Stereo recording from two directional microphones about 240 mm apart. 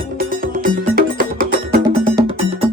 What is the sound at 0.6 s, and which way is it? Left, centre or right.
Music, right.